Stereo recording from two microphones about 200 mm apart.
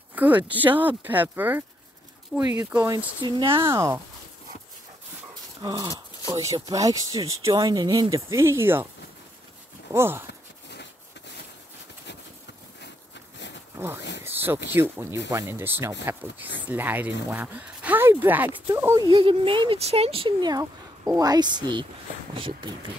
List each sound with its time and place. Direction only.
0.1 s speech: 10° right (ahead or behind)
3.2 s speech: 25° right (ahead or behind)
3.7 s speech: 15° right (ahead or behind)
5.6 s speech: 20° right (ahead or behind)
9.9 s speech: 10° right (ahead or behind)
10.7 s a sound: 60° left (ahead or behind)
13.7 s speech: 10° right (ahead or behind)
14.2 s a sound: 10° right (ahead or behind)
14.7 s speech: 10° right (ahead or behind)
19.0 s speech: 25° right (ahead or behind)